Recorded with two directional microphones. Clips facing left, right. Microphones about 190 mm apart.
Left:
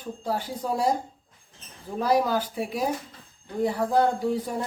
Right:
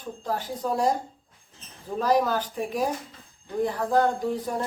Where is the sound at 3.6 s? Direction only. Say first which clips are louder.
Left 1 dB; 10° left (ahead or behind).